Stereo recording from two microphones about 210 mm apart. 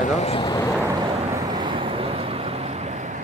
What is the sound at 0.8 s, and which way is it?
Vehicle, 20° right (ahead or behind).